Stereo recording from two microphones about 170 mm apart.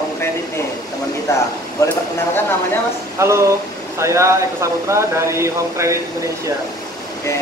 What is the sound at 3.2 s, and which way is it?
Speech, 15° right (ahead or behind).